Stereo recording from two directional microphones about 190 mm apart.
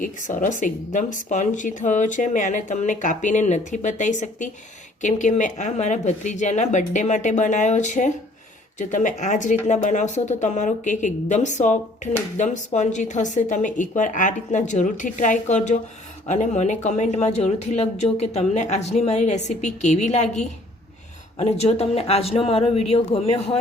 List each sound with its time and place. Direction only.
0.0 s speech: 45° left (ahead or behind)